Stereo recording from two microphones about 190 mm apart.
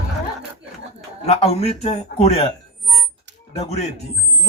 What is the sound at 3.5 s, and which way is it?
Speech, 35° left (ahead or behind).